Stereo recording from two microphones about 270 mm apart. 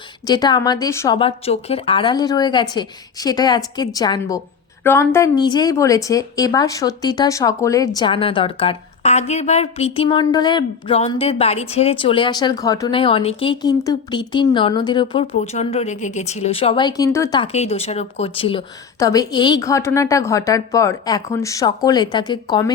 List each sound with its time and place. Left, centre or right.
0.3 s a woman's voice: centre